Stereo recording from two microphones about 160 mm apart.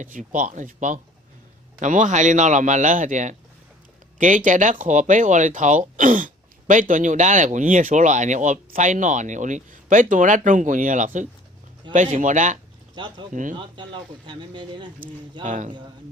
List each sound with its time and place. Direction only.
0.0 s speech: 55° right (ahead or behind)
13.0 s speech: 30° right (ahead or behind)
13.3 s speech: 55° right (ahead or behind)
13.6 s speech: 30° right (ahead or behind)
15.4 s speech: 50° right (ahead or behind)